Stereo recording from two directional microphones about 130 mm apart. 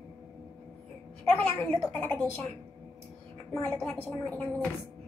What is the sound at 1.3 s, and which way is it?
A woman's voice, 15° left (ahead or behind).